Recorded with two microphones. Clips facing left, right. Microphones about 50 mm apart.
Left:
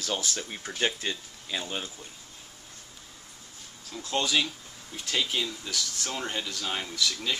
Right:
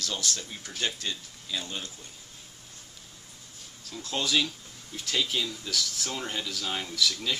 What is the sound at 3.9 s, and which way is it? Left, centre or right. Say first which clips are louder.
Speech: left 1 dB; centre.